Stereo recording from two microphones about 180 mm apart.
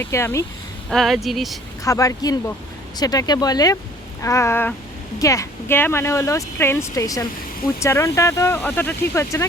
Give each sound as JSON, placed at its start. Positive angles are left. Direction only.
{"t": 0.0, "sound": "speech", "side_deg": 15}
{"t": 0.9, "sound": "speech", "side_deg": 0}
{"t": 1.8, "sound": "speech", "side_deg": 20}